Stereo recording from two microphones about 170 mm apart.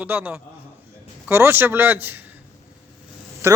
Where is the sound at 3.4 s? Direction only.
15° right (ahead or behind).